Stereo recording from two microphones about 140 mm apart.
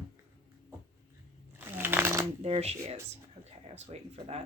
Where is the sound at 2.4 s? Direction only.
50° right (ahead or behind).